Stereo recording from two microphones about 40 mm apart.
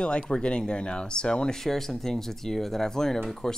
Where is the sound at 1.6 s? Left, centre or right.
Centre.